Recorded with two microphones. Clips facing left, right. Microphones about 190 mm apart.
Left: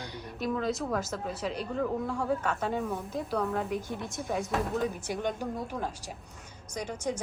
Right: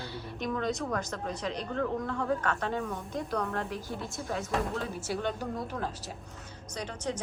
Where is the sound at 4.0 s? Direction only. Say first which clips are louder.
Left 2 dB; 15° left (ahead or behind).